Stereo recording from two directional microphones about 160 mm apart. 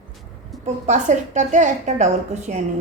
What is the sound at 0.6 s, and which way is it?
A woman's voice, 50° right (ahead or behind).